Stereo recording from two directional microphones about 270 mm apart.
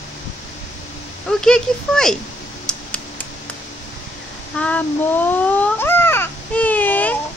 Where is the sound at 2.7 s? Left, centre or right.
Centre.